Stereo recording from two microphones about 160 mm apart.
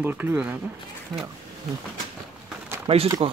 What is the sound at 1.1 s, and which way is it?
Speech, centre (ahead or behind).